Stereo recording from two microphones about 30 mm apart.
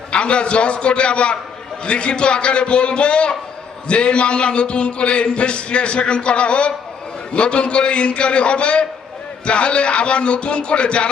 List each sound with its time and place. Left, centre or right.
0.1 s a man's voice: left